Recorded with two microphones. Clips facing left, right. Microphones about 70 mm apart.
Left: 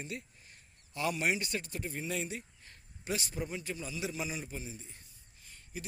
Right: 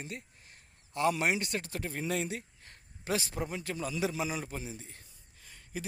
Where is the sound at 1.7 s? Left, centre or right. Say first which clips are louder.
Right 3 dB; right.